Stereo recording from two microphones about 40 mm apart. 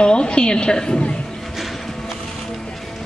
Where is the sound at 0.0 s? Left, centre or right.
Left.